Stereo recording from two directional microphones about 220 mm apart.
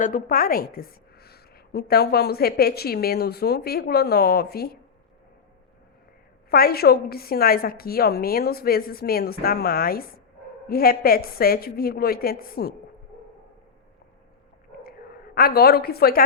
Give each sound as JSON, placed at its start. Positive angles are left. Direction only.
{"t": 0.0, "sound": "a woman's voice", "side_deg": 40}
{"t": 6.5, "sound": "a woman's voice", "side_deg": 45}
{"t": 14.8, "sound": "a sound", "side_deg": 45}